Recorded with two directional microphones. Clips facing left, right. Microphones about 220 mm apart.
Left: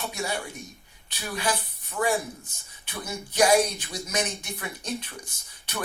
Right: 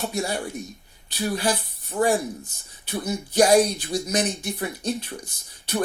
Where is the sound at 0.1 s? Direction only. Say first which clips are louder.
Right 5 dB; 40° right (ahead or behind).